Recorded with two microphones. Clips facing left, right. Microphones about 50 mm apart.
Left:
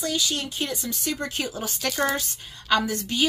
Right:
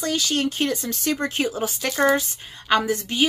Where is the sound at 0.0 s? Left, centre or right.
Right.